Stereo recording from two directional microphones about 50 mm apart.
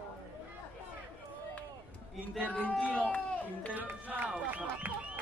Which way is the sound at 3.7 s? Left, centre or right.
Right.